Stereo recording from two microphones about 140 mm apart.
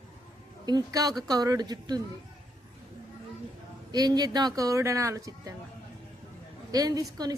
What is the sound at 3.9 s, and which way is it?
A woman's voice, 30° right (ahead or behind).